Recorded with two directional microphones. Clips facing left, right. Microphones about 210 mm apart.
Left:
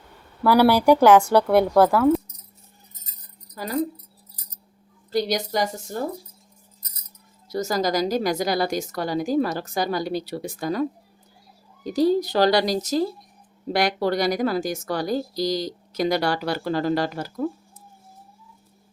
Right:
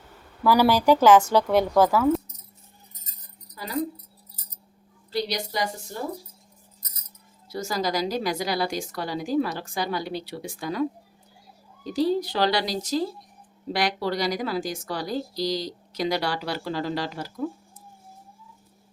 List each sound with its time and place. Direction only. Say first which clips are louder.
0.4 s a woman's voice: left 3 dB; 15° left (ahead or behind)
5.1 s a woman's voice: left 5 dB; 45° left (ahead or behind)
7.5 s a woman's voice: left 4 dB; 40° left (ahead or behind)
11.9 s a woman's voice: left 4 dB; 45° left (ahead or behind)